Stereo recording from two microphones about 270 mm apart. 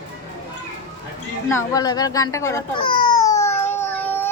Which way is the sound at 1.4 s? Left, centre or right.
Centre.